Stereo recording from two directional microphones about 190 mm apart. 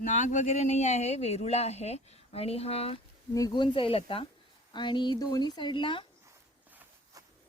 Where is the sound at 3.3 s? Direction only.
20° left (ahead or behind).